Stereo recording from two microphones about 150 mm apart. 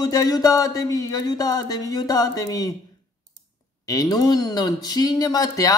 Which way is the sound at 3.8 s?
25° left (ahead or behind).